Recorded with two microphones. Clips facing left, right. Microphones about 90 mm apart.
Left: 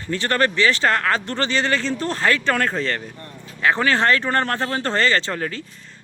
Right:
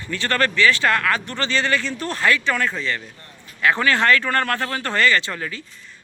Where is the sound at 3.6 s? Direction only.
25° left (ahead or behind).